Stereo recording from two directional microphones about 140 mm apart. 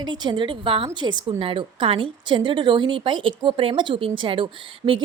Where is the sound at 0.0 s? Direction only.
35° right (ahead or behind).